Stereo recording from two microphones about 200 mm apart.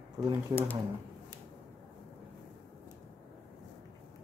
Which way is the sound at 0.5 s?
20° right (ahead or behind).